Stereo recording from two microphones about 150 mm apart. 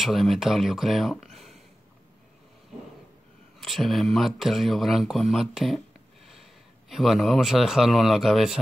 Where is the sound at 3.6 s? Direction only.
Centre (ahead or behind).